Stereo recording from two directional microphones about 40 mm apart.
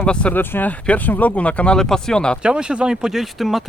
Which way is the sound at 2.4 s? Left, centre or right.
Right.